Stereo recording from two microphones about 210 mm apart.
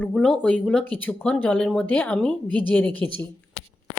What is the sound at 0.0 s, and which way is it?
Speech, 5° left (ahead or behind).